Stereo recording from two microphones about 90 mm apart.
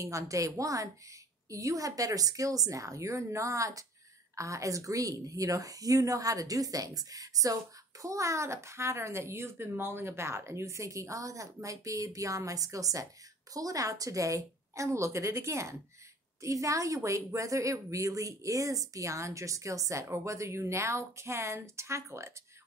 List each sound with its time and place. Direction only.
0.0 s a woman's voice: 35° right (ahead or behind)